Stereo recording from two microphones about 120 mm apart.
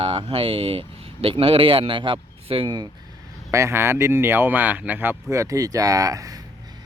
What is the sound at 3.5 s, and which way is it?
Speech, 25° right (ahead or behind).